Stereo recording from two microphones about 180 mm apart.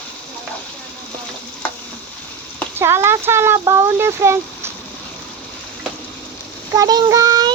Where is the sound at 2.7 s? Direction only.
15° right (ahead or behind).